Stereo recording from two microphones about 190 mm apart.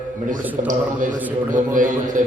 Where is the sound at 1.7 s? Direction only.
45° right (ahead or behind).